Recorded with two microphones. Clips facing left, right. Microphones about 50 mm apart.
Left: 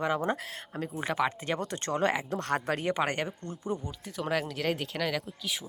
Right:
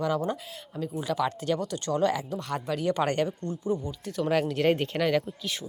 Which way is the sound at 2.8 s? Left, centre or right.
Centre.